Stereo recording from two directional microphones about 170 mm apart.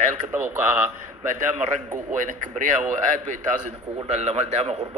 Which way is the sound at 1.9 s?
50° right (ahead or behind).